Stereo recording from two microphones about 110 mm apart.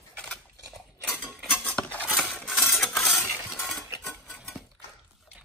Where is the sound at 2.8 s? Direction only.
5° left (ahead or behind).